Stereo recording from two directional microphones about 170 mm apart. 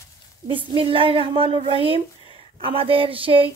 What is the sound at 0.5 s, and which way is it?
A woman's voice, 30° right (ahead or behind).